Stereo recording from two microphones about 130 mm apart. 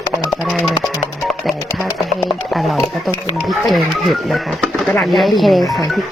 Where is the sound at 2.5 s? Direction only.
Centre (ahead or behind).